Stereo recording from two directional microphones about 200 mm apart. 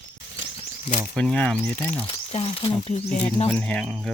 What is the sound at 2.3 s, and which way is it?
Speech, 30° left (ahead or behind).